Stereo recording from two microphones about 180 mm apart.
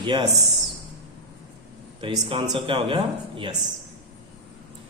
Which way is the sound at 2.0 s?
30° right (ahead or behind).